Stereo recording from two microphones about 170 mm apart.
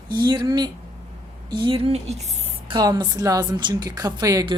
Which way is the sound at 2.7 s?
25° right (ahead or behind).